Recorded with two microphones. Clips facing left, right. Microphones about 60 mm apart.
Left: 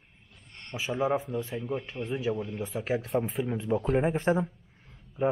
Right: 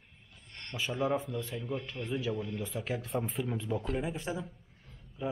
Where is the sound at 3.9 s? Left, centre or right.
Left.